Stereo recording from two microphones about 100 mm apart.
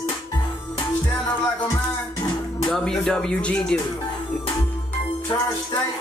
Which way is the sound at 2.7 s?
5° left (ahead or behind).